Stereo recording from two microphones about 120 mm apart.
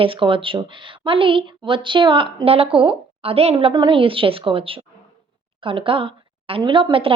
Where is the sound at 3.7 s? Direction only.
40° right (ahead or behind).